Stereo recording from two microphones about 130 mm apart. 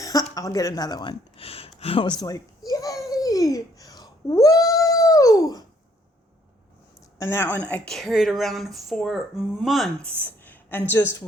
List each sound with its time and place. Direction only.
0.0 s a sound: 25° left (ahead or behind)
0.3 s speech: 25° left (ahead or behind)
1.4 s a sound: 50° left (ahead or behind)
1.8 s babbling: 45° left (ahead or behind)
7.2 s speech: 20° left (ahead or behind)
7.7 s speech: 5° left (ahead or behind)